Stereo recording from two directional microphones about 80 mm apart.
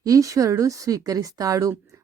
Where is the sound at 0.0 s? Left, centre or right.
Right.